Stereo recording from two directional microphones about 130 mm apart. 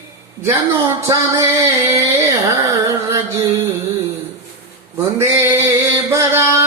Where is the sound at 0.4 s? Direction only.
20° right (ahead or behind).